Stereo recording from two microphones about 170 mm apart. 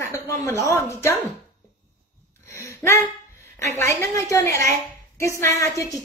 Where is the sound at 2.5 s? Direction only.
15° left (ahead or behind).